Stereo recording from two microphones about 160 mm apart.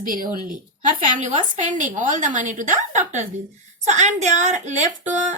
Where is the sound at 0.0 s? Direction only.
60° right (ahead or behind).